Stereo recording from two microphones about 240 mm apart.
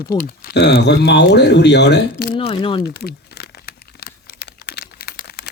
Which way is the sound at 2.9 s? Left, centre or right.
Left.